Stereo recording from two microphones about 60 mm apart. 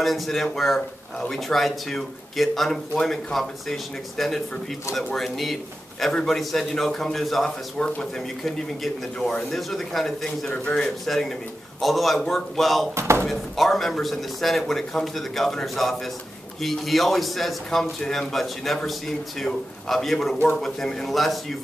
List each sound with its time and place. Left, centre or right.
0.0 s a man's voice: centre
11.1 s a man's voice: centre
12.9 s speech: right
13.3 s a man's voice: centre